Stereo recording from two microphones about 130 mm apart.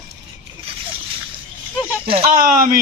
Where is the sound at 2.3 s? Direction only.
90° right.